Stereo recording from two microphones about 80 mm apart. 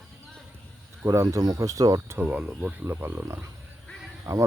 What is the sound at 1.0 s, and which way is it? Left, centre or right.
Speech, right.